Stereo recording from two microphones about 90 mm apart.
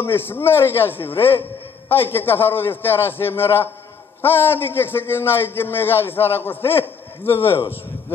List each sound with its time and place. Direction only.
0.0 s a man's voice: 25° left (ahead or behind)